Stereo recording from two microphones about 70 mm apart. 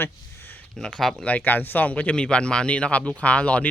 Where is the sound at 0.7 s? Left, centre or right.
Centre.